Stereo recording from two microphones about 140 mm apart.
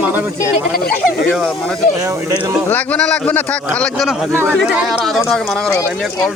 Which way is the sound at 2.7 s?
10° left (ahead or behind).